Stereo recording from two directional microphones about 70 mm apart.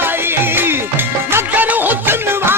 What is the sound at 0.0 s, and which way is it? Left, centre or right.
Music, right.